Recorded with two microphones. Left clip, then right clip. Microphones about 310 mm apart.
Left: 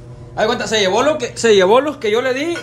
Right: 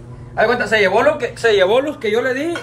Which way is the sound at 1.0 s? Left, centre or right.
Left.